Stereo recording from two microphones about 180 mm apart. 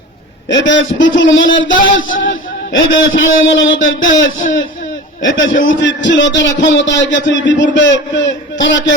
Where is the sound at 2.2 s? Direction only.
90° left.